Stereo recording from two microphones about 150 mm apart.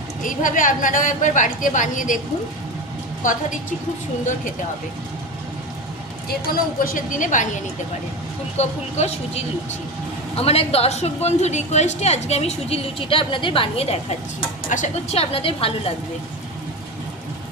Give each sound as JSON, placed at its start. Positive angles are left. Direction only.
{"t": 0.2, "sound": "a woman's voice", "side_deg": 60}
{"t": 6.7, "sound": "a woman's voice", "side_deg": 65}